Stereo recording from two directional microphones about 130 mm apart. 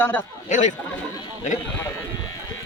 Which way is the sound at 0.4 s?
70° left (ahead or behind).